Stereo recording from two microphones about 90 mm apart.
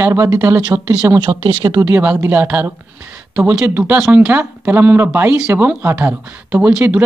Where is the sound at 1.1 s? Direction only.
55° right (ahead or behind).